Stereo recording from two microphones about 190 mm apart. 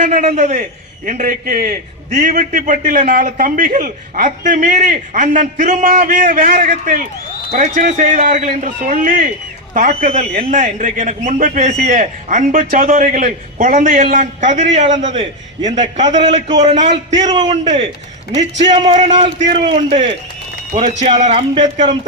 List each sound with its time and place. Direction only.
0.0 s a man's voice: 40° right (ahead or behind)
16.0 s a man's voice: 20° right (ahead or behind)
16.6 s a man's voice: 40° right (ahead or behind)
17.2 s a man's voice: 20° right (ahead or behind); by 21.9 s 40° right (ahead or behind)